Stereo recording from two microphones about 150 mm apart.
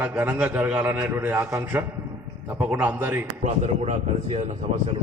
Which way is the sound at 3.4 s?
50° right (ahead or behind).